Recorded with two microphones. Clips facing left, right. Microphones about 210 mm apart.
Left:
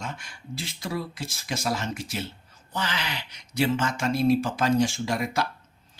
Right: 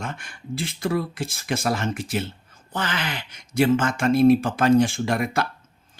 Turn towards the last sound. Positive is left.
turn(degrees=-55)  # may be behind; listen again after turning